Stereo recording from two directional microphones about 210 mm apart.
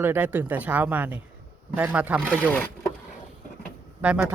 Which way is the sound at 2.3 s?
5° left (ahead or behind).